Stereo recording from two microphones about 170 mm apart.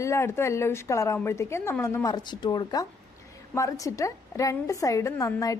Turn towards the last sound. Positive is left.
turn(degrees=20)  # may be behind; listen again after turning